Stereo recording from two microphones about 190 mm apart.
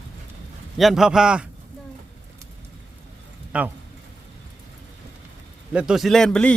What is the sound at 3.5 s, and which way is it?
Speech, 5° right (ahead or behind).